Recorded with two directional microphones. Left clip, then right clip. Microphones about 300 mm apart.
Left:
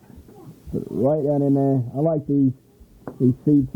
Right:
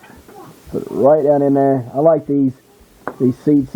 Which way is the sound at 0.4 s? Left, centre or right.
Centre.